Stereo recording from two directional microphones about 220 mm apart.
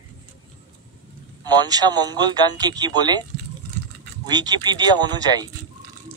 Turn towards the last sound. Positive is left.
turn(degrees=-20)  # may be behind; listen again after turning